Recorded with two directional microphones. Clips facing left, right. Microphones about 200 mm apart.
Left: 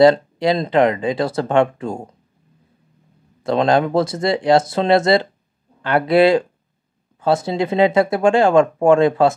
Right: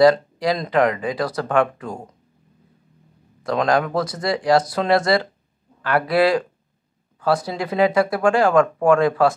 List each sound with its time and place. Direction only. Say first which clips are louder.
0.0 s speech: left 2 dB; 25° left (ahead or behind)
3.4 s speech: left 3 dB; 25° left (ahead or behind)